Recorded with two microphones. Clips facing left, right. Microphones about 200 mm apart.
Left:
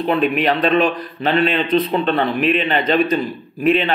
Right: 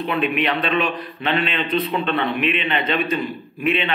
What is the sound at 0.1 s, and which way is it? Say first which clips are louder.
A man's voice: left 5 dB; 40° left (ahead or behind).